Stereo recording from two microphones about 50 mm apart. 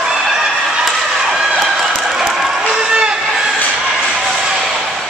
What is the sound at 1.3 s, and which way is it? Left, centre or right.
Run, centre.